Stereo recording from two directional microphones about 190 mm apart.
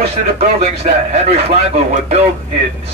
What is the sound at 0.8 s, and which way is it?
Speech, 30° right (ahead or behind).